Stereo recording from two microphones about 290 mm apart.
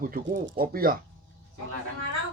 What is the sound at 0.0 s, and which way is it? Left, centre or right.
Speech, right.